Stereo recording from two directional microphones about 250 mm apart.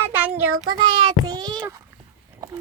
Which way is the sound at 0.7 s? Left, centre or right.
Centre.